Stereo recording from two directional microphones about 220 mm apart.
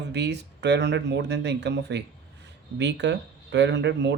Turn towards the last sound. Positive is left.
turn(degrees=-50)  # may be behind; listen again after turning